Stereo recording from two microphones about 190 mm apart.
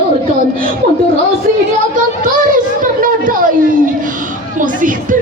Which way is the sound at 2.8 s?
45° right (ahead or behind).